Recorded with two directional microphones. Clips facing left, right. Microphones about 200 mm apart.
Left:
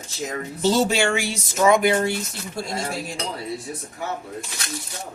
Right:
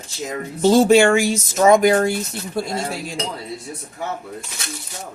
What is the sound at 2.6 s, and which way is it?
Speech, 60° right (ahead or behind).